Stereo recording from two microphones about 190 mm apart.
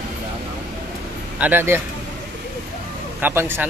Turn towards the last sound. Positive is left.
turn(degrees=-10)  # may be behind; listen again after turning